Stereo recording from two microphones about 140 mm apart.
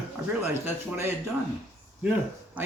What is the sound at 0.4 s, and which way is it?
Speech, 15° right (ahead or behind).